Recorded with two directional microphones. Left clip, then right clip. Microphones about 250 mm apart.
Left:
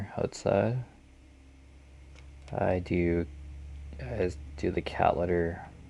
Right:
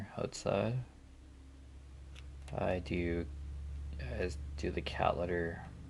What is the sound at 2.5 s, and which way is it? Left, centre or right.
Speech, left.